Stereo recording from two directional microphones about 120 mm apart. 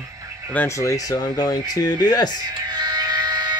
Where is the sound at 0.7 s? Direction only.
30° left (ahead or behind).